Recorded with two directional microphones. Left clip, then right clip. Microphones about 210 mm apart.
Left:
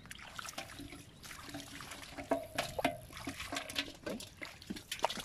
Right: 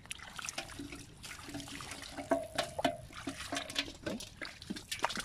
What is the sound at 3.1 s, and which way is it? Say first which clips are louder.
Toilet flush: right 1 dB; 25° left (ahead or behind).